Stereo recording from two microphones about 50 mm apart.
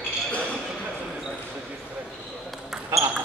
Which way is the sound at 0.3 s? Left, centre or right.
Left.